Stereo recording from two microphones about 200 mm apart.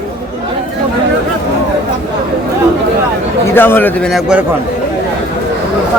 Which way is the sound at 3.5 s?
10° left (ahead or behind).